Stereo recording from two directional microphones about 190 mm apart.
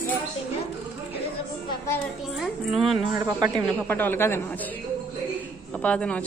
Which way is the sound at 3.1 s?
20° right (ahead or behind).